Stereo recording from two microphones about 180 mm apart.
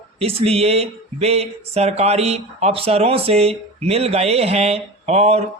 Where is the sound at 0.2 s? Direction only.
35° right (ahead or behind).